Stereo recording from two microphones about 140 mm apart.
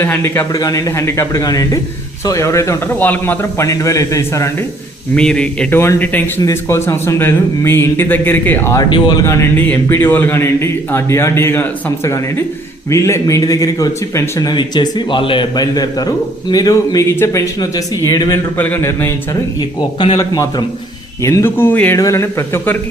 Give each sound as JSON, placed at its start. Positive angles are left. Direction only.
{"t": 0.0, "sound": "a man's voice", "side_deg": 15}
{"t": 5.1, "sound": "a man's voice", "side_deg": 5}
{"t": 8.8, "sound": "speech", "side_deg": 30}
{"t": 9.2, "sound": "a man's voice", "side_deg": 15}
{"t": 20.1, "sound": "a man's voice", "side_deg": 25}